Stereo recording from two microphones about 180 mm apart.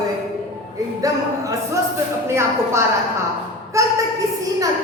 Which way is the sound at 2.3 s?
15° right (ahead or behind).